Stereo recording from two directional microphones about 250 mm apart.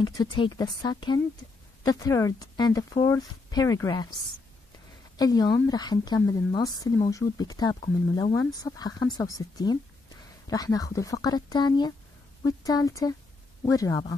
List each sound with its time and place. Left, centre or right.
0.0 s speech: centre
5.1 s speech: centre